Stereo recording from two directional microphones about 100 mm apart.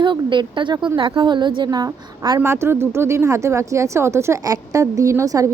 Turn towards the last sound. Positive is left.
turn(degrees=-35)  # may be behind; listen again after turning